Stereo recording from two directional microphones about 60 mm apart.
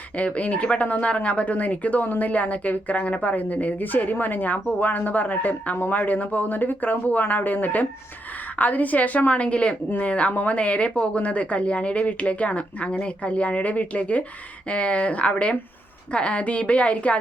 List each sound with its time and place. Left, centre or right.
0.2 s speech: left